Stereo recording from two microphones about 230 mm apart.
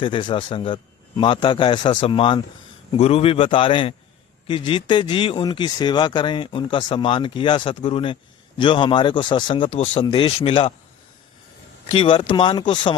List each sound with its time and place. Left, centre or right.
0.0 s speech: left
11.9 s speech: left